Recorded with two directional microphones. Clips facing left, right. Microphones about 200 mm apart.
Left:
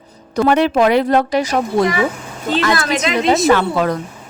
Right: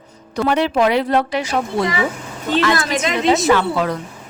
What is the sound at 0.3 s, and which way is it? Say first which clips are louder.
A woman's voice: left 3 dB; 50° left (ahead or behind).